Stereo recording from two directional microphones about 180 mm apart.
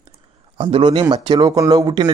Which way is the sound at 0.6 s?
30° right (ahead or behind).